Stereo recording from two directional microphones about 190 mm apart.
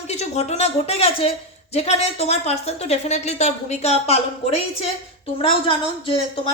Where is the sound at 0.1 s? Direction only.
35° left (ahead or behind).